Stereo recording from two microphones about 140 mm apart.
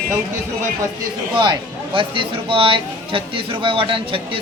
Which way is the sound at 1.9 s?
40° right (ahead or behind).